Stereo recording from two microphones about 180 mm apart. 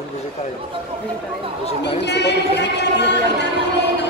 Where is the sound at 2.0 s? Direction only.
70° left (ahead or behind).